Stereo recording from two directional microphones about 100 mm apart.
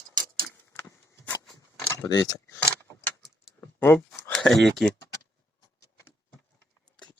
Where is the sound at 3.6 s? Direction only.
20° left (ahead or behind).